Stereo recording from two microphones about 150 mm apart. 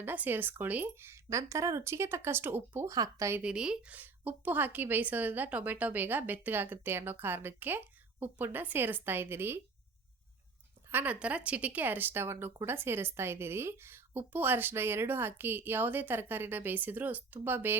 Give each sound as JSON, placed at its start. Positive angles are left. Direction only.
{"t": 0.0, "sound": "speech", "side_deg": -10}
{"t": 3.4, "sound": "speech", "side_deg": -5}
{"t": 10.9, "sound": "speech", "side_deg": -10}